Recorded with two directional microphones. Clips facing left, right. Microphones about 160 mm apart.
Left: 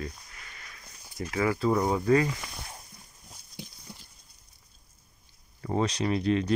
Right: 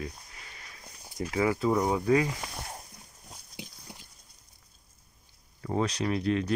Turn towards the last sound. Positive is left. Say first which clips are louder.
# left 2 dB
turn(degrees=-5)  # may be behind; listen again after turning